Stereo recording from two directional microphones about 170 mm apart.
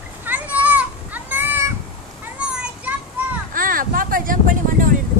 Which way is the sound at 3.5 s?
55° right (ahead or behind).